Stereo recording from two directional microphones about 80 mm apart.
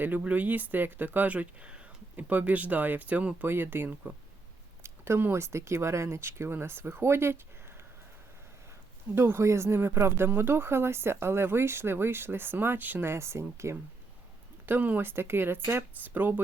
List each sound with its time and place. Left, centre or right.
0.0 s speech: right
9.1 s speech: right
14.7 s speech: right